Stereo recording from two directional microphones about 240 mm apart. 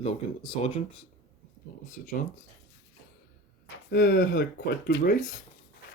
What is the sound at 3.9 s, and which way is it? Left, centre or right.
Speech, left.